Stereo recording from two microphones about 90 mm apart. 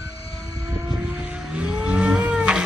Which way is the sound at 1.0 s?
10° right (ahead or behind).